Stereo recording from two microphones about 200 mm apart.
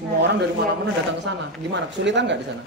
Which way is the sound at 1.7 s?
60° right (ahead or behind).